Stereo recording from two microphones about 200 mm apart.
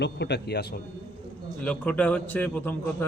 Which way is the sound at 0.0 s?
55° left (ahead or behind).